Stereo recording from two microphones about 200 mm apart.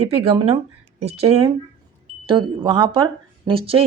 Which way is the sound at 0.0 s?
30° right (ahead or behind).